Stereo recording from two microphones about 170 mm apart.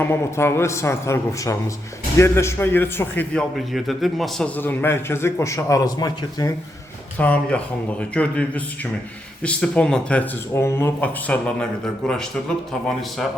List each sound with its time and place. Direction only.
0.0 s a man's voice: 15° left (ahead or behind)
3.7 s a man's voice: centre (ahead or behind); by 6.5 s 20° left (ahead or behind)
7.2 s a man's voice: 10° left (ahead or behind)